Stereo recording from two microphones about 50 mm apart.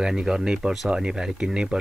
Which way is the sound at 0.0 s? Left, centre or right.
Centre.